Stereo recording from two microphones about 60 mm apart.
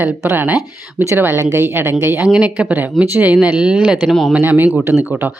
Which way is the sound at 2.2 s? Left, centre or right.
Centre.